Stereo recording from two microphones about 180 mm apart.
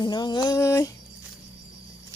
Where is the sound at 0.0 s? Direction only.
25° left (ahead or behind).